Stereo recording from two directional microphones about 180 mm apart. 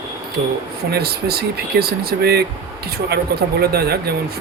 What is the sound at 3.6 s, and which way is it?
Speech, 60° right (ahead or behind).